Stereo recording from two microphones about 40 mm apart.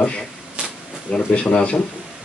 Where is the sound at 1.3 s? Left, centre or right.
Left.